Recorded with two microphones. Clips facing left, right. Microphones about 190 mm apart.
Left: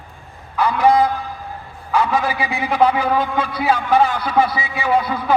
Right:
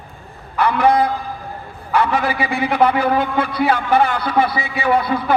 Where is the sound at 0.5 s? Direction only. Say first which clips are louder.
Even; 60° right (ahead or behind).